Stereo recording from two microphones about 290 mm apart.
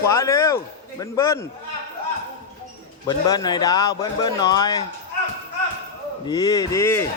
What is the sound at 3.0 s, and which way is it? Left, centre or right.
A man's voice, centre.